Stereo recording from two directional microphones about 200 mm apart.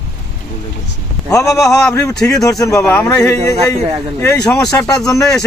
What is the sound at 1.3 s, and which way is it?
Speech, 15° left (ahead or behind).